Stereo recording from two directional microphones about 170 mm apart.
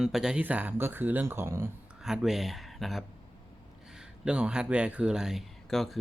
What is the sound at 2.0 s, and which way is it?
Speech, centre (ahead or behind).